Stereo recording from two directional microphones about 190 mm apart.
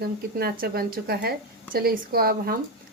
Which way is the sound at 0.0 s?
55° right (ahead or behind).